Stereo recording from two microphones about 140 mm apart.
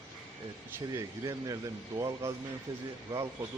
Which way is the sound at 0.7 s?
20° right (ahead or behind).